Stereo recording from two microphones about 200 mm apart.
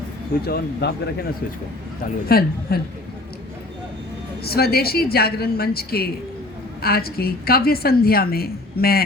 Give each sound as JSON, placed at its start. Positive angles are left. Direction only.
{"t": 0.4, "sound": "a woman's voice", "side_deg": 55}
{"t": 2.3, "sound": "a woman's voice", "side_deg": 50}
{"t": 4.4, "sound": "a woman's voice", "side_deg": 50}